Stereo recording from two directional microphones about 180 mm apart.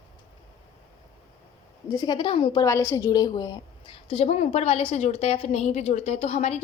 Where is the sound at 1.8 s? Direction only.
25° left (ahead or behind).